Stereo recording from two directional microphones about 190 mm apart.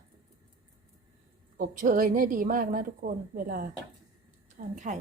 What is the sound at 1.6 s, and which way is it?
A woman's voice, 45° right (ahead or behind).